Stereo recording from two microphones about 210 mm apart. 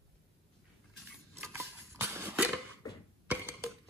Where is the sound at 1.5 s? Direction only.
10° right (ahead or behind).